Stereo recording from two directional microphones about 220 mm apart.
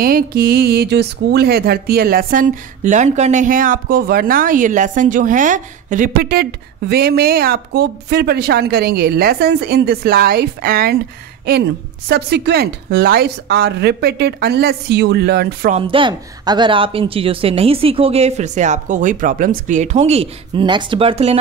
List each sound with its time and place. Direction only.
0.0 s speech: 45° right (ahead or behind)
12.1 s speech: 50° right (ahead or behind)
15.7 s speech: 25° right (ahead or behind)